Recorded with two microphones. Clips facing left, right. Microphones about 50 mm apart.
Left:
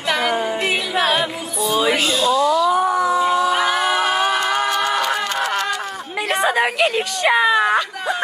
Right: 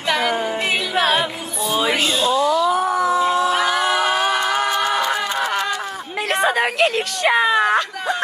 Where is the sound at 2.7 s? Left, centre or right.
Centre.